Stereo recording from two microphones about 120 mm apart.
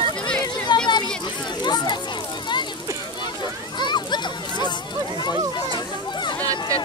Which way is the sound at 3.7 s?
40° left (ahead or behind).